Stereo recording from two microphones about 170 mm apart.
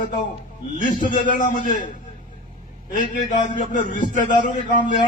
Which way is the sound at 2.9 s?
50° left (ahead or behind).